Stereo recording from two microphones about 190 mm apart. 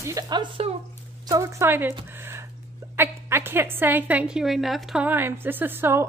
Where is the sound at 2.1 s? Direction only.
10° right (ahead or behind).